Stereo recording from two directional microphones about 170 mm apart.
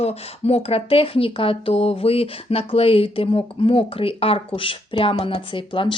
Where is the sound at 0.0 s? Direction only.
35° left (ahead or behind).